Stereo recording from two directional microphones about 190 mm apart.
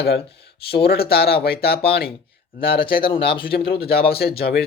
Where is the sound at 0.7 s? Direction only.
55° left (ahead or behind).